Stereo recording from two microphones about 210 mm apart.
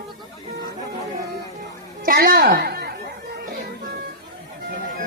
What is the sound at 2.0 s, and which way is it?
Chatter, 45° right (ahead or behind).